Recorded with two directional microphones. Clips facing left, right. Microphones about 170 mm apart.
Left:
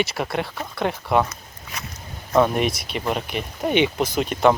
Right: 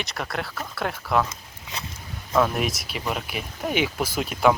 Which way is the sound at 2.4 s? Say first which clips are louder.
Left 4 dB; centre (ahead or behind).